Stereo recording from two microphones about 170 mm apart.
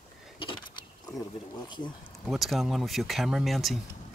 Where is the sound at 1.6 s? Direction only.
25° left (ahead or behind).